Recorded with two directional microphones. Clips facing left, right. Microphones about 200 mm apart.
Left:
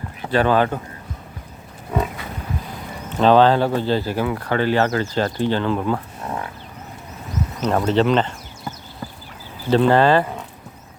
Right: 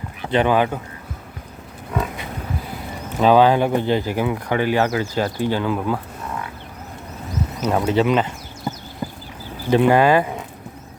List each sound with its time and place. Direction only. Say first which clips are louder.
0.3 s speech: even; 15° right (ahead or behind)
3.2 s speech: even; 10° right (ahead or behind)
7.6 s speech: even; 10° right (ahead or behind)
9.0 s a sound: right 5 dB; 20° right (ahead or behind)
9.6 s speech: even; 15° right (ahead or behind)